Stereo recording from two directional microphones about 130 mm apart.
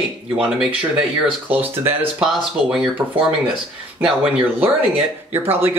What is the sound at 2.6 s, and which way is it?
Speech, 5° right (ahead or behind).